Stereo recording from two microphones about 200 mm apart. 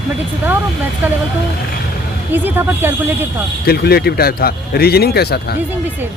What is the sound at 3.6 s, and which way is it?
Speech, 50° left (ahead or behind).